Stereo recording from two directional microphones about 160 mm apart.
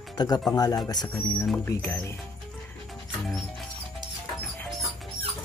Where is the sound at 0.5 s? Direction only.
25° left (ahead or behind).